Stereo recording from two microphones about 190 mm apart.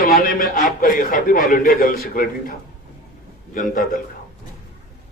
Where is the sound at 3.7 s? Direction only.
45° left (ahead or behind).